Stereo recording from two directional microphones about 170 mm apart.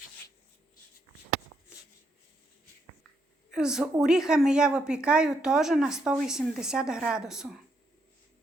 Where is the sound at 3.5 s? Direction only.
5° right (ahead or behind).